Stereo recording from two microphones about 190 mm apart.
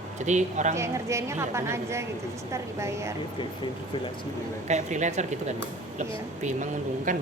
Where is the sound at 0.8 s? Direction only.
15° right (ahead or behind).